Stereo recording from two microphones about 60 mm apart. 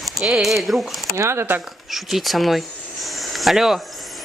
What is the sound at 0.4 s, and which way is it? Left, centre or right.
Speech, centre.